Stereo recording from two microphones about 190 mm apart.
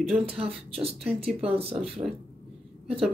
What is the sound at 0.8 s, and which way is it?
Speech, 30° right (ahead or behind).